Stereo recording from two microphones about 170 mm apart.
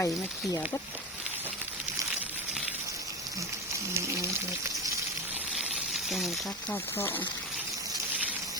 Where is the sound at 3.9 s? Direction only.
15° right (ahead or behind).